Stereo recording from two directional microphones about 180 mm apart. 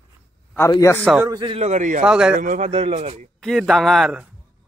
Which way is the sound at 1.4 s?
35° right (ahead or behind).